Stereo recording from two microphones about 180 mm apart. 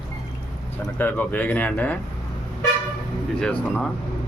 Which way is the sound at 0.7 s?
10° left (ahead or behind).